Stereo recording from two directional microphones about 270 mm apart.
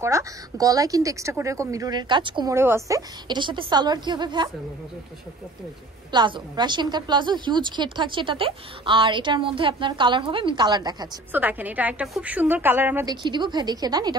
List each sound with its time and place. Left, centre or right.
0.0 s a woman's voice: centre
6.1 s a woman's voice: centre